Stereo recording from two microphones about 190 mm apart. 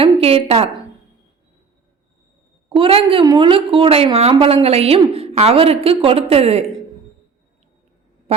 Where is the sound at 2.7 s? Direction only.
30° right (ahead or behind).